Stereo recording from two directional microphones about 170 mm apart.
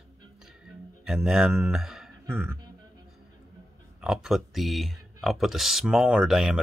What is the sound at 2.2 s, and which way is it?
Speech, 15° right (ahead or behind).